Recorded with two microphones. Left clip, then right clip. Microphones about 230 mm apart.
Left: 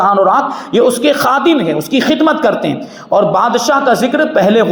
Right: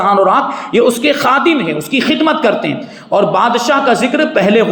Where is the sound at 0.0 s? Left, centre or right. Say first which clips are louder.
Even; centre.